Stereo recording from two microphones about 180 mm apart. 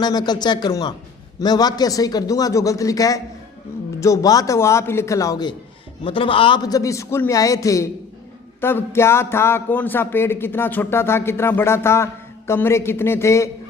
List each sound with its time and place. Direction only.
0.0 s a man's voice: 25° left (ahead or behind)